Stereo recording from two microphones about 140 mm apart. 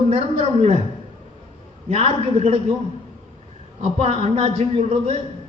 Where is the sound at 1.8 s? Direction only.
45° right (ahead or behind).